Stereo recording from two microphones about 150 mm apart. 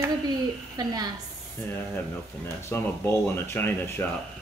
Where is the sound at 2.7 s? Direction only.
15° left (ahead or behind).